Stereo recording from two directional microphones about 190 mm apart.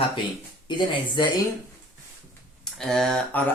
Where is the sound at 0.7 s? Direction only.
25° left (ahead or behind).